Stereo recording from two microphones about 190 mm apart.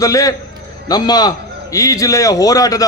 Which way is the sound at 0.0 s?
20° left (ahead or behind).